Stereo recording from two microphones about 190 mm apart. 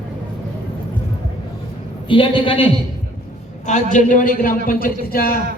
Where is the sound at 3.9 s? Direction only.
40° left (ahead or behind).